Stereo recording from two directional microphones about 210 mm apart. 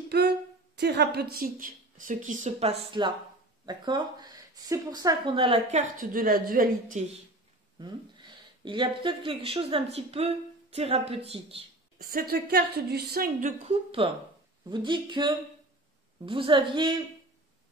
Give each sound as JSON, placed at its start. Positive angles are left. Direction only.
{"t": 0.1, "sound": "speech", "side_deg": -50}
{"t": 2.9, "sound": "speech", "side_deg": -20}
{"t": 7.8, "sound": "speech", "side_deg": -20}
{"t": 12.0, "sound": "a woman's voice", "side_deg": -45}
{"t": 14.0, "sound": "speech", "side_deg": -25}